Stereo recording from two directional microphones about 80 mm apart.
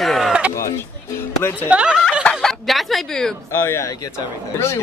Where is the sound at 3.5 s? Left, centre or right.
Left.